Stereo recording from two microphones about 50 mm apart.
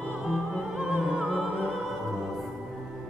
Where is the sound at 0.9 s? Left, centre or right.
Right.